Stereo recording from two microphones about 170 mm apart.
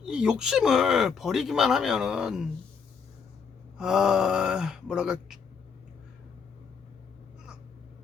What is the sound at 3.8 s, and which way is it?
Speech, 5° right (ahead or behind).